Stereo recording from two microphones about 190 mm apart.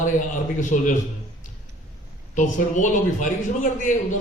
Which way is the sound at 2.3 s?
40° left (ahead or behind).